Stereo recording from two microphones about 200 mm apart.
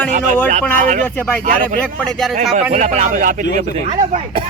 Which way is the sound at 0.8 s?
40° right (ahead or behind).